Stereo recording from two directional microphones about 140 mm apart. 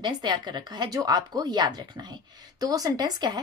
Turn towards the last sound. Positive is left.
turn(degrees=-30)  # may be behind; listen again after turning